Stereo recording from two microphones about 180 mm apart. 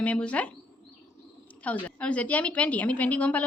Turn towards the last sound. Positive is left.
turn(degrees=10)  # may be behind; listen again after turning